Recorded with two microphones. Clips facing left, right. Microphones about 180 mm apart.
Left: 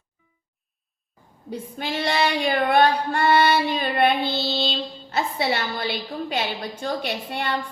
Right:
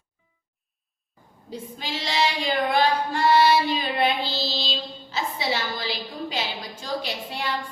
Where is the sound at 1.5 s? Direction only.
60° left (ahead or behind).